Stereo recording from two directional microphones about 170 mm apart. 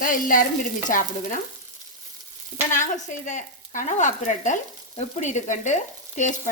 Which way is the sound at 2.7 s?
45° left (ahead or behind).